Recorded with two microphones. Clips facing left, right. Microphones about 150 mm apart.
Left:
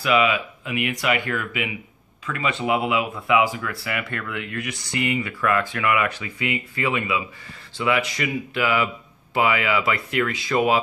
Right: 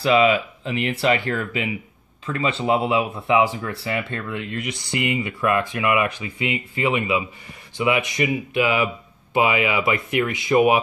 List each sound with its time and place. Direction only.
0.0 s speech: 30° right (ahead or behind)